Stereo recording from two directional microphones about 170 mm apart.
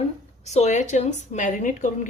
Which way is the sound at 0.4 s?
40° left (ahead or behind).